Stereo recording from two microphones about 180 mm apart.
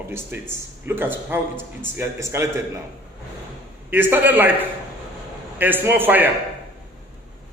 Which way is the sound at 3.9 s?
10° right (ahead or behind).